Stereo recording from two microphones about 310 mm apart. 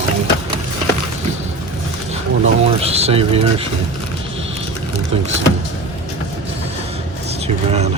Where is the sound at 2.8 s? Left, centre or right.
Centre.